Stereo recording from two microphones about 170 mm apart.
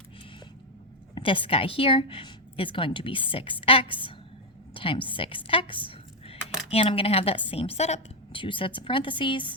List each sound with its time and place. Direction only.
1.1 s a woman's voice: 30° left (ahead or behind)